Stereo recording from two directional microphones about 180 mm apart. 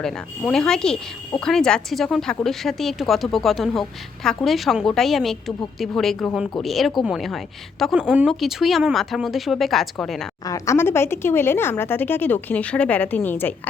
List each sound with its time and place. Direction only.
0.0 s speech: 5° left (ahead or behind)
10.4 s speech: 15° left (ahead or behind)